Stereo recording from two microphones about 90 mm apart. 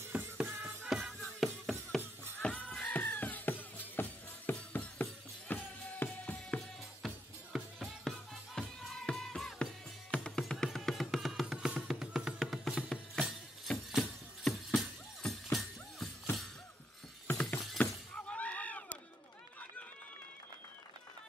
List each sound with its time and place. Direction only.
0.1 s music: 20° right (ahead or behind)
0.8 s music: centre (ahead or behind); by 6.6 s 15° left (ahead or behind)
7.5 s music: centre (ahead or behind)
17.3 s shatter: 15° left (ahead or behind)